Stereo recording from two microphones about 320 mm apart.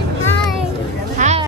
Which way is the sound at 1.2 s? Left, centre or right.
Right.